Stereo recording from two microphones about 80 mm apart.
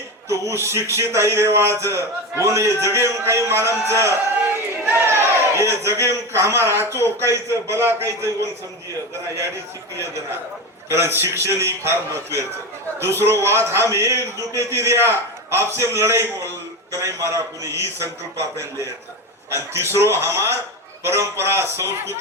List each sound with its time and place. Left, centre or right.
0.3 s a man's voice: right
4.9 s a sound: right
6.1 s a man's voice: right
10.8 s a man's voice: right